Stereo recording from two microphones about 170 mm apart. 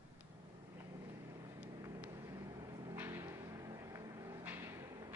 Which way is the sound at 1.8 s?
15° right (ahead or behind).